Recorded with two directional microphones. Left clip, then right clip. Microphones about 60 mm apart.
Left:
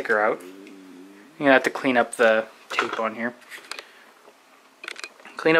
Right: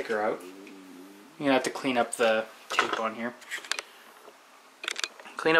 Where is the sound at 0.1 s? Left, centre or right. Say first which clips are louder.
Left 8 dB; left.